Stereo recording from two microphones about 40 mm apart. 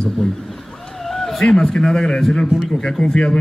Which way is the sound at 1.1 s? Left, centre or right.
Centre.